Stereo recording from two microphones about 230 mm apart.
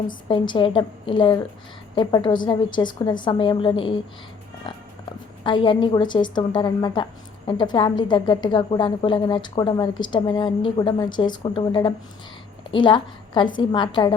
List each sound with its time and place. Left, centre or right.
0.3 s a woman's voice: left
5.4 s a woman's voice: left